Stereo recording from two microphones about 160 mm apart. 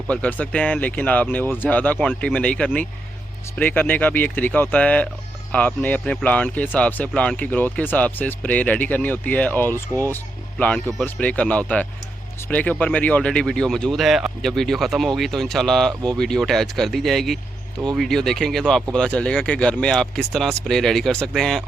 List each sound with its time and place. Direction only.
0.1 s speech: 10° left (ahead or behind)